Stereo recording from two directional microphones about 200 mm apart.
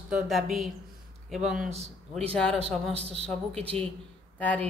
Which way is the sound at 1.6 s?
35° right (ahead or behind).